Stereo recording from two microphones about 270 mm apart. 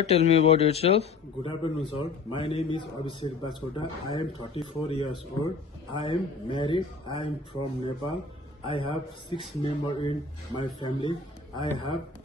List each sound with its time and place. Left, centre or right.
0.0 s a man's voice: left
8.6 s speech: centre